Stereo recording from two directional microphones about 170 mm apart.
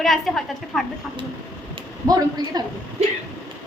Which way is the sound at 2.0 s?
25° right (ahead or behind).